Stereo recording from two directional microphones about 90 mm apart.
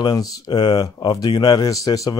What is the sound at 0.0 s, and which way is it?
A man's voice, 45° left (ahead or behind).